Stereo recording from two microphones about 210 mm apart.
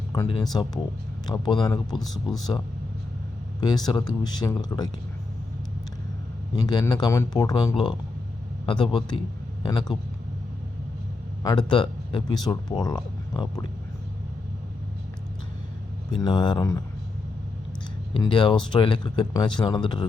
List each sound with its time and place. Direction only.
0.1 s a sound: 20° left (ahead or behind)
0.5 s speech: 20° left (ahead or behind)
3.6 s speech: 20° left (ahead or behind)
6.6 s speech: 20° left (ahead or behind)
8.6 s speech: 25° left (ahead or behind)
11.4 s speech: 20° left (ahead or behind)
16.1 s speech: 20° left (ahead or behind)
18.2 s speech: 20° left (ahead or behind)